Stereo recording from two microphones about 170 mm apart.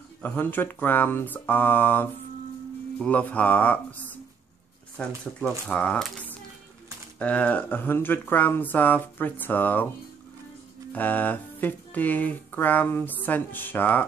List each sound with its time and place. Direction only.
0.2 s speech: 10° left (ahead or behind)
10.9 s speech: 10° left (ahead or behind)